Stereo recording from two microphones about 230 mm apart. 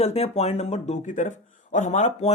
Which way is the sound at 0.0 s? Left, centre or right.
Left.